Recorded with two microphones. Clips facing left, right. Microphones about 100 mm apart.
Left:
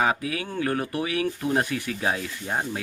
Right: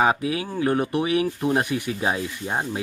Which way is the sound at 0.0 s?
25° right (ahead or behind).